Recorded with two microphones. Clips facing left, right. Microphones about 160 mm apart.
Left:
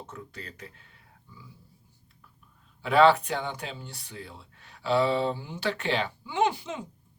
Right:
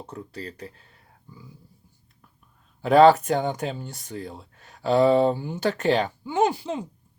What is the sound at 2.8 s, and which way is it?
Speech, 40° right (ahead or behind).